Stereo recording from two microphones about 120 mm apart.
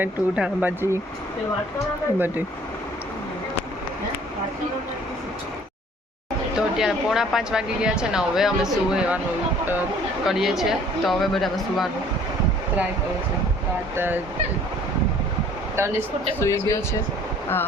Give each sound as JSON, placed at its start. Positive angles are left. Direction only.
{"t": 0.0, "sound": "speech", "side_deg": -10}
{"t": 2.1, "sound": "speech", "side_deg": -15}
{"t": 6.6, "sound": "speech", "side_deg": -5}
{"t": 10.2, "sound": "speech", "side_deg": -5}
{"t": 13.9, "sound": "speech", "side_deg": -15}
{"t": 15.8, "sound": "speech", "side_deg": -20}
{"t": 16.4, "sound": "speech", "side_deg": 25}